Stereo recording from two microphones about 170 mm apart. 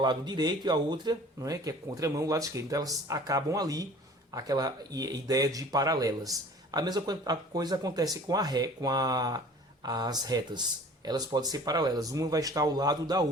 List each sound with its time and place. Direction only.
0.0 s speech: 25° right (ahead or behind)